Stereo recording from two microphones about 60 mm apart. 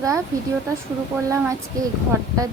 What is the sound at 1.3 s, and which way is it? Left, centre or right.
Speech, right.